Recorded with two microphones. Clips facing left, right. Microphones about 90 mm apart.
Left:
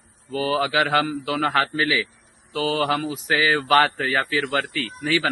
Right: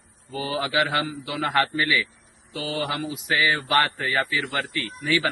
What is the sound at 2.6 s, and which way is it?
A man's voice, 45° left (ahead or behind).